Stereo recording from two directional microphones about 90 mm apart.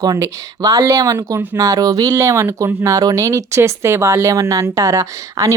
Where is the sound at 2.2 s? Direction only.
30° right (ahead or behind).